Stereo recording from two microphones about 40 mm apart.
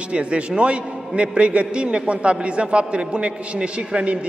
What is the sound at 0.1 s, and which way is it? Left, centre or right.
A man's voice, right.